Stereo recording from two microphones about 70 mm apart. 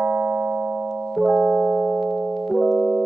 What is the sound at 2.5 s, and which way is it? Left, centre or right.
Piano, centre.